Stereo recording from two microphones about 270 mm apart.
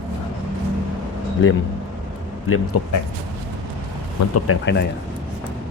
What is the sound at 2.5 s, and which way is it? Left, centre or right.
Speech, left.